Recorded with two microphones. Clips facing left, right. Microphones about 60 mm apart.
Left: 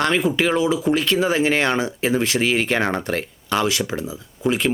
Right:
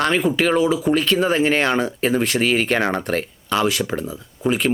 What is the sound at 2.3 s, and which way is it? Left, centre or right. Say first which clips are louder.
Speech: right 1 dB; right.